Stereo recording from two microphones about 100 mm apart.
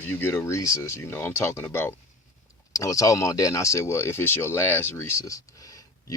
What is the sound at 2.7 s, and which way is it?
Speech, 35° left (ahead or behind).